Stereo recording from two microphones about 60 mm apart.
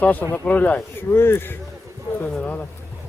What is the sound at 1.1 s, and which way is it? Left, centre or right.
Speech, left.